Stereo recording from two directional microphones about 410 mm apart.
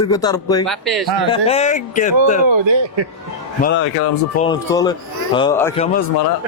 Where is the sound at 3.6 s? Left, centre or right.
Left.